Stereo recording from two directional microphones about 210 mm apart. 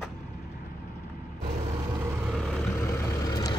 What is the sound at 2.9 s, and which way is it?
Vehicle, 15° left (ahead or behind).